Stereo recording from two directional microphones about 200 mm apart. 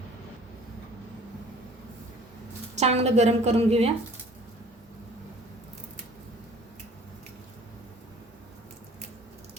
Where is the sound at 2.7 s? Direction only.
35° right (ahead or behind).